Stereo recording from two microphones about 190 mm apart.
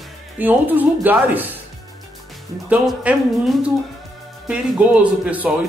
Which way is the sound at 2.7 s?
5° right (ahead or behind).